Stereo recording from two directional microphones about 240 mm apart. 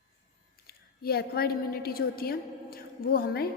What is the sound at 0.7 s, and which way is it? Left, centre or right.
A woman's voice, left.